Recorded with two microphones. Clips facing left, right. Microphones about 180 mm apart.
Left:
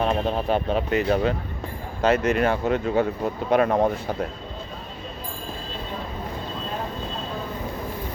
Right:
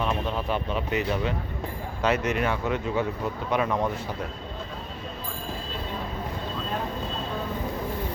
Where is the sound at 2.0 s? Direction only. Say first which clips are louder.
Left 5 dB; 50° left (ahead or behind).